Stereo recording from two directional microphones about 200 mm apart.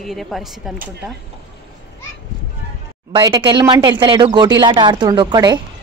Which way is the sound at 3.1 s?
20° right (ahead or behind).